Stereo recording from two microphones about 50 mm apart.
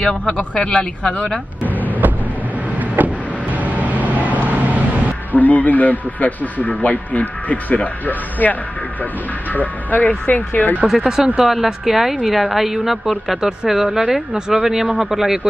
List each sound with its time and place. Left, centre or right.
0.0 s speech: left
3.0 s vehicle: right
5.3 s a man's voice: left
11.0 s a woman's voice: centre